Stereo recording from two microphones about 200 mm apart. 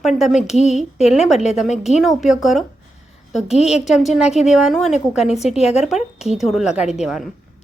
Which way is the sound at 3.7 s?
Centre (ahead or behind).